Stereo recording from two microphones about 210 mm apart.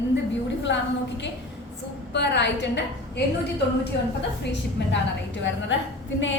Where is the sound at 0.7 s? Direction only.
55° left (ahead or behind).